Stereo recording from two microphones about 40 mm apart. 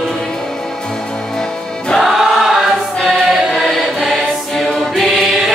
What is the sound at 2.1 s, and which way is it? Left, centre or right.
Choir, centre.